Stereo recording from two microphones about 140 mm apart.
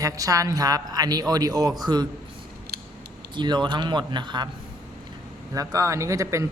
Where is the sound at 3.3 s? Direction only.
35° right (ahead or behind).